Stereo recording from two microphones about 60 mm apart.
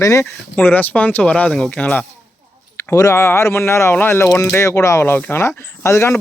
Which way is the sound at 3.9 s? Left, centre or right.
Left.